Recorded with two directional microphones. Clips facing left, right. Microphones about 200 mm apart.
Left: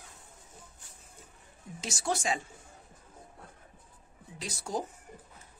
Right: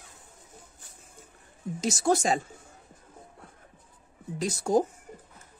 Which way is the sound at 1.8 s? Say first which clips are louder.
Right 8 dB; 40° right (ahead or behind).